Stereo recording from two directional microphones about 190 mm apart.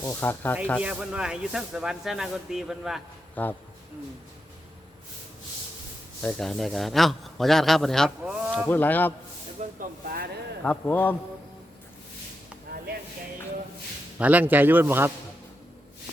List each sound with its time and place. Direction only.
0.0 s a man's voice: 10° left (ahead or behind)
0.8 s a man's voice: 5° right (ahead or behind)
3.4 s a man's voice: 10° left (ahead or behind)
6.2 s a man's voice: 5° left (ahead or behind)
8.6 s a man's voice: 10° left (ahead or behind)
9.6 s speech: 40° right (ahead or behind)
10.6 s a man's voice: 10° left (ahead or behind)
14.2 s a man's voice: 10° right (ahead or behind)